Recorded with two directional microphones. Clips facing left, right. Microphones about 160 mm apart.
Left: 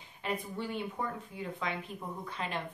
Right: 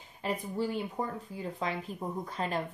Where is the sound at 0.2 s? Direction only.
35° right (ahead or behind).